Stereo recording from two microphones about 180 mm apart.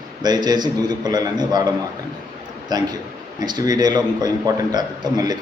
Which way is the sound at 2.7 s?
20° right (ahead or behind).